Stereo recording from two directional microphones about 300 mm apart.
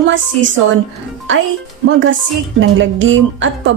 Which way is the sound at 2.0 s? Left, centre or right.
Right.